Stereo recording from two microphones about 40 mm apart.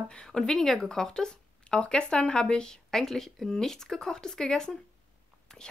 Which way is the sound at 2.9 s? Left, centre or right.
Centre.